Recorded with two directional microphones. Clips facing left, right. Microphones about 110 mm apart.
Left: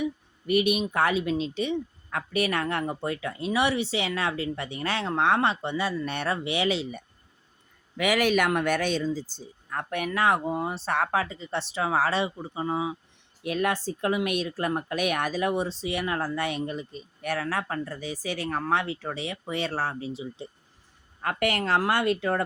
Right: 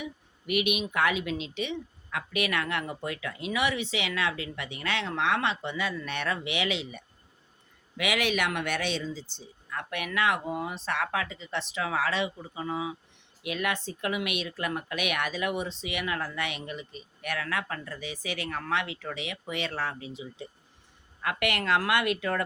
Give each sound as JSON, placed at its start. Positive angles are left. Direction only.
{"t": 0.0, "sound": "speech", "side_deg": 35}